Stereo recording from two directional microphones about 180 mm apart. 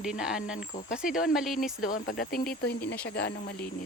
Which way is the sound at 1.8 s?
55° left (ahead or behind).